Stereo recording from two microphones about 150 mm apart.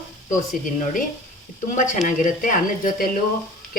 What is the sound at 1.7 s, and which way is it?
Speech, 55° left (ahead or behind).